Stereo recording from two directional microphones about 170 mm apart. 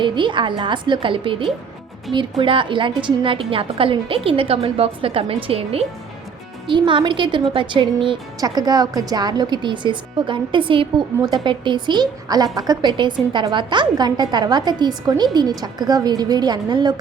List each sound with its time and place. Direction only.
0.0 s a woman's voice: 30° right (ahead or behind)